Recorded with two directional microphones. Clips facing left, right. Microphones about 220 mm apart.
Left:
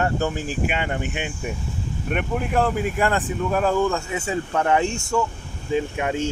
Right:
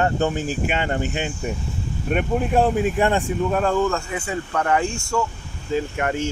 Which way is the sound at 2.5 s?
25° right (ahead or behind).